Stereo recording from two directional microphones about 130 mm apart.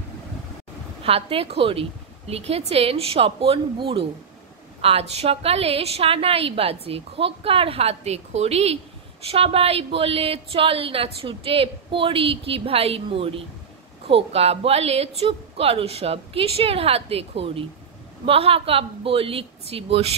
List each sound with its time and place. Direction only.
1.0 s speech: 50° right (ahead or behind)